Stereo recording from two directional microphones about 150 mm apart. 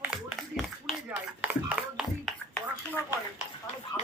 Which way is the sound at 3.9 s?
10° left (ahead or behind).